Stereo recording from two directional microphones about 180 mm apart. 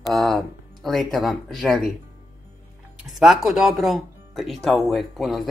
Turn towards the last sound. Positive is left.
turn(degrees=0)  # may be behind; listen again after turning